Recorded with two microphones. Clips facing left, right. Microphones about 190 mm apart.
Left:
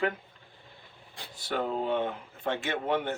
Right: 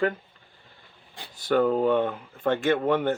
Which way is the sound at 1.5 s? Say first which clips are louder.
Right 8 dB; 55° right (ahead or behind).